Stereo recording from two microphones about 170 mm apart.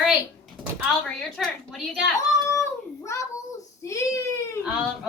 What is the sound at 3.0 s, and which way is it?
Child singing, 20° left (ahead or behind).